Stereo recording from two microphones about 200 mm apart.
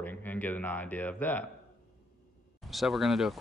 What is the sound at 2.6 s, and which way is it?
Speech, centre (ahead or behind).